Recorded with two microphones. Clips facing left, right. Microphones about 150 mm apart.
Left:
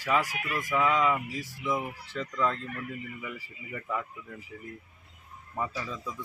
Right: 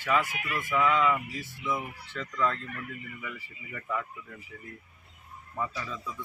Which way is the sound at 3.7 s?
15° left (ahead or behind).